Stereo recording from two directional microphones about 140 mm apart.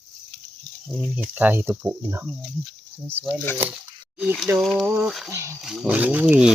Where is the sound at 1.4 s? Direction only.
15° right (ahead or behind).